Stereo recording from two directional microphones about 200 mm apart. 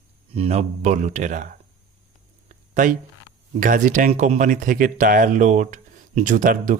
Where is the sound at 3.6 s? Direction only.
40° right (ahead or behind).